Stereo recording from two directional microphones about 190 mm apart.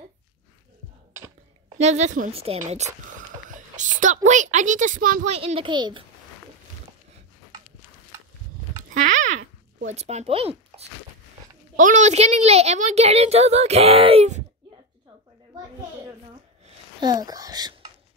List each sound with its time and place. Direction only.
1.8 s speech: 35° right (ahead or behind)
5.3 s a child's voice: 30° right (ahead or behind)
8.9 s a sound: 40° right (ahead or behind)
9.8 s a woman's voice: 35° right (ahead or behind)
17.0 s speech: 20° right (ahead or behind)